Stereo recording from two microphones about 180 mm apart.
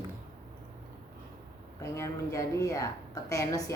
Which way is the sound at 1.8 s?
15° left (ahead or behind).